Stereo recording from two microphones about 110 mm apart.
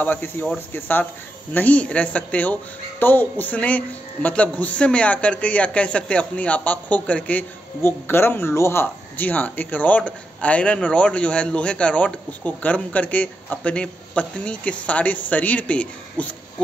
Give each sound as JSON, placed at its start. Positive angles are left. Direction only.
{"t": 0.0, "sound": "speech", "side_deg": 15}